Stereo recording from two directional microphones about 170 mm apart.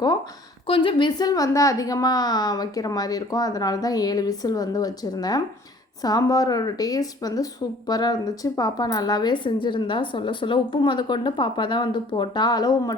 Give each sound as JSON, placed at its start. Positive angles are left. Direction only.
{"t": 0.7, "sound": "speech", "side_deg": 30}